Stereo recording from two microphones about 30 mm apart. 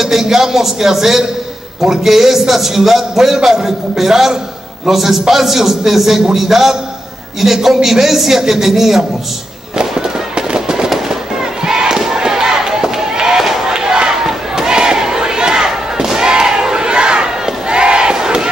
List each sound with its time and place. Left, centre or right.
0.0 s a man's voice: centre
9.8 s fireworks: right
11.6 s battle cry: right
12.0 s chop: centre
13.7 s a sound: right
17.5 s battle cry: right